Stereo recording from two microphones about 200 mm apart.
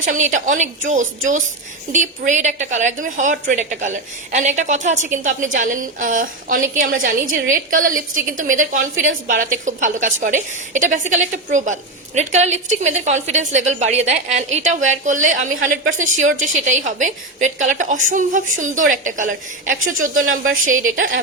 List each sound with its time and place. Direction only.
0.0 s a woman's voice: 40° right (ahead or behind)
20.9 s a woman's voice: 70° right (ahead or behind)